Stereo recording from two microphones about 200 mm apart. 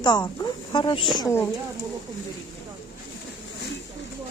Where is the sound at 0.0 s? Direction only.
20° left (ahead or behind).